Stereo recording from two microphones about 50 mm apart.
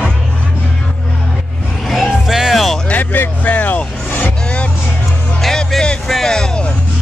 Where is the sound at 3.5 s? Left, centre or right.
Left.